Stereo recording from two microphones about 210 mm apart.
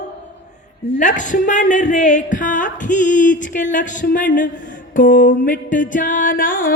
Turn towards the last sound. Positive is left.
turn(degrees=40)  # may be behind; listen again after turning